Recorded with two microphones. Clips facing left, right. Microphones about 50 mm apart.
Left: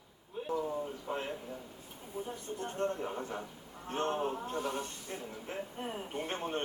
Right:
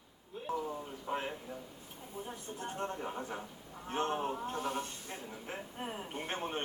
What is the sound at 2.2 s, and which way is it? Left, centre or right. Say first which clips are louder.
Speech: left 1 dB; right.